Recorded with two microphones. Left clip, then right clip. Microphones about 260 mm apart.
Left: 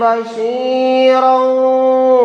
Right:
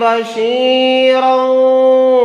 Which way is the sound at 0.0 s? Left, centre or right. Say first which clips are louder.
Right 1 dB; right.